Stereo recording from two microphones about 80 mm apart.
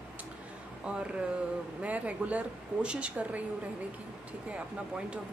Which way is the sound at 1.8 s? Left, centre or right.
Centre.